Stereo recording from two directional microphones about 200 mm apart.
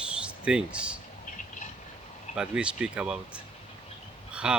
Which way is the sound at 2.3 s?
5° right (ahead or behind).